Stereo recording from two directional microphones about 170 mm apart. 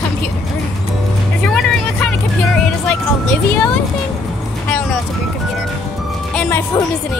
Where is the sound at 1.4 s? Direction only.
5° left (ahead or behind).